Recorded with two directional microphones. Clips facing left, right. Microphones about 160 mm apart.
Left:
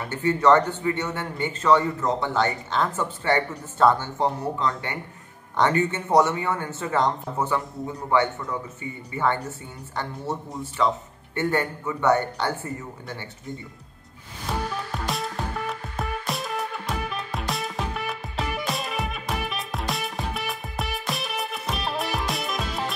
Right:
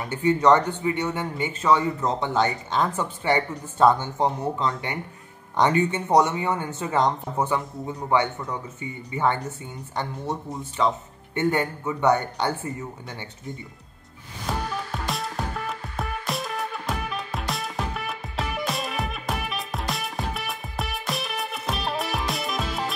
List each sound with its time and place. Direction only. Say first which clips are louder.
0.1 s a man's voice: even; 15° right (ahead or behind)
15.0 s music: left 2 dB; centre (ahead or behind)